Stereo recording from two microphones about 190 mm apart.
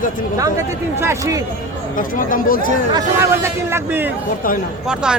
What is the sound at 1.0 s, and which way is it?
Speech, 15° right (ahead or behind).